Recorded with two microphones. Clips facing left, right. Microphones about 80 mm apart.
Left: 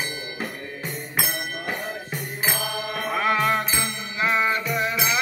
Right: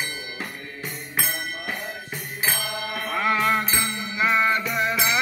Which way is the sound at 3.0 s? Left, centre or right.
Centre.